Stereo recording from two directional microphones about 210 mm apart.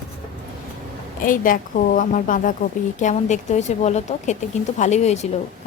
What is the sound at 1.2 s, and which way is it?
Speech, 40° left (ahead or behind).